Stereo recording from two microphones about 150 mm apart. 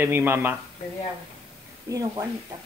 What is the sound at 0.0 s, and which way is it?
Speech, 15° right (ahead or behind).